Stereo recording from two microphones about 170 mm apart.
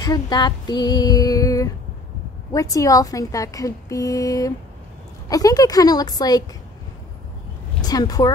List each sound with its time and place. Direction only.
0.0 s a woman's voice: 25° left (ahead or behind)
7.8 s speech: 20° left (ahead or behind)